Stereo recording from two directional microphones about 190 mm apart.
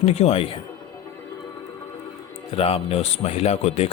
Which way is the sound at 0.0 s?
35° left (ahead or behind).